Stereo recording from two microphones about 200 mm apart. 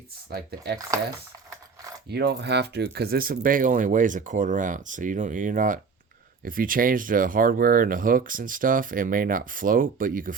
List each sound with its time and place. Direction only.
0.3 s speech: 55° right (ahead or behind)
2.0 s speech: 55° right (ahead or behind)